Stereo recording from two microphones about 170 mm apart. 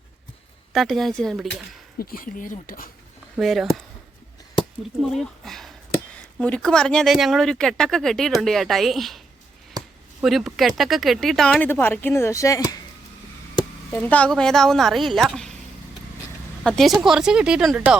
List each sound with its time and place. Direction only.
0.7 s speech: centre (ahead or behind)
2.0 s speech: 60° left (ahead or behind)
3.3 s speech: centre (ahead or behind)
5.0 s speech: centre (ahead or behind)
9.7 s a sound: 20° right (ahead or behind)
10.2 s speech: centre (ahead or behind); by 12.8 s 20° left (ahead or behind)
13.9 s speech: 10° left (ahead or behind)
16.6 s speech: centre (ahead or behind)